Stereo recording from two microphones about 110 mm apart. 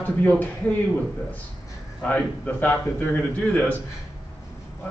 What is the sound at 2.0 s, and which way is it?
A man's voice, 15° left (ahead or behind).